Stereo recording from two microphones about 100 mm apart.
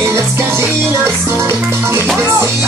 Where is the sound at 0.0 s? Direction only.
25° right (ahead or behind).